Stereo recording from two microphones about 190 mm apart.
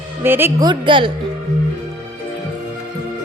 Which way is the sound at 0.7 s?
25° right (ahead or behind).